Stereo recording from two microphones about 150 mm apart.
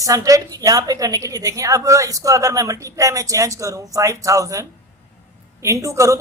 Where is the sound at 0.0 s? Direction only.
20° right (ahead or behind).